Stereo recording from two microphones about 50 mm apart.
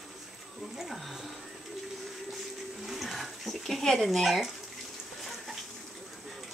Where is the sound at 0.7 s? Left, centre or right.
Centre.